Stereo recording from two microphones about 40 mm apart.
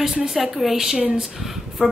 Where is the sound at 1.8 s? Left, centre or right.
Right.